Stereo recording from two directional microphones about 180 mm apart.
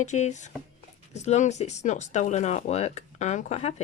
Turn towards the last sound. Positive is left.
turn(degrees=40)  # may be behind; listen again after turning